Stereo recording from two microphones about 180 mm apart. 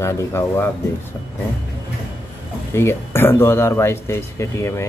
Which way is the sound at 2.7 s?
15° left (ahead or behind).